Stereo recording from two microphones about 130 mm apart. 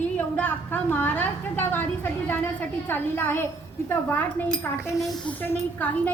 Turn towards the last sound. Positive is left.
turn(degrees=10)  # may be behind; listen again after turning